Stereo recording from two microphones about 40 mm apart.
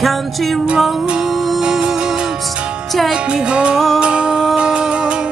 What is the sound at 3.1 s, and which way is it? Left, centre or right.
Music, right.